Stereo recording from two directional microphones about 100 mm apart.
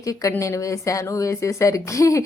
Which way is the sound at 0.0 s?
35° left (ahead or behind).